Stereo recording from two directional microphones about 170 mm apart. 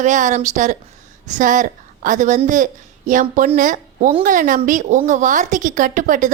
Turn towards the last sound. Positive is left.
turn(degrees=-50)  # may be behind; listen again after turning